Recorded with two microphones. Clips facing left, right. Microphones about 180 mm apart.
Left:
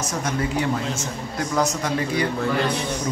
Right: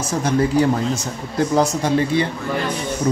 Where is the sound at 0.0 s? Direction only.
35° right (ahead or behind).